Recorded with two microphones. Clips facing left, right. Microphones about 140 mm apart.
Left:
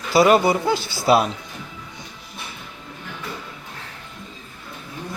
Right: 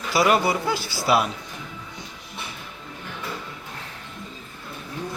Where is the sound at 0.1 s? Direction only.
25° left (ahead or behind).